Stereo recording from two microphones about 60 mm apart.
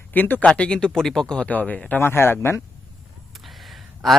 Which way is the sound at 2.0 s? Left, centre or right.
Left.